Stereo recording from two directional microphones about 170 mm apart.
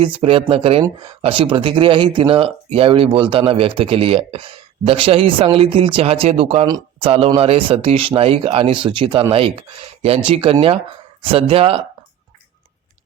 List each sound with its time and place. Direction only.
0.0 s speech: 30° right (ahead or behind)